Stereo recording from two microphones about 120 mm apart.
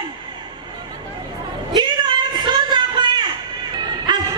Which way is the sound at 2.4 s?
40° right (ahead or behind).